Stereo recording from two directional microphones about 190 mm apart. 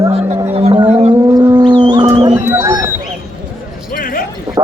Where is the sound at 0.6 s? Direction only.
30° right (ahead or behind).